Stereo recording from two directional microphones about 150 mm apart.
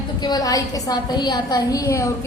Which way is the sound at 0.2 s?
25° left (ahead or behind).